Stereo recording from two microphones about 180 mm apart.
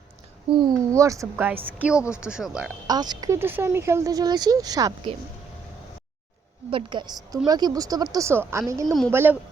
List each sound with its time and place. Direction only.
0.5 s a woman's voice: 20° right (ahead or behind); by 2.7 s 5° right (ahead or behind)
2.8 s speech: 20° right (ahead or behind)
6.7 s speech: 30° right (ahead or behind)
8.9 s speech: centre (ahead or behind)
9.1 s a woman's voice: 10° right (ahead or behind)